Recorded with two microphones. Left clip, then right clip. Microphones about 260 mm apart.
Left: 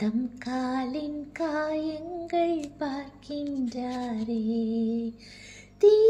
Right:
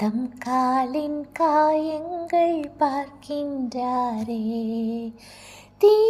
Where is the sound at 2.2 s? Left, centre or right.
Centre.